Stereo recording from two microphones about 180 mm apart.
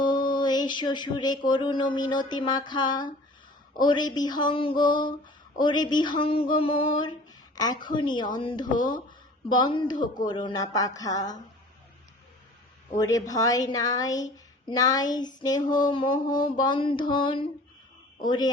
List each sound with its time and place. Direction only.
0.0 s a sound: 25° left (ahead or behind)
3.8 s speech: 25° left (ahead or behind)
13.0 s speech: 20° left (ahead or behind)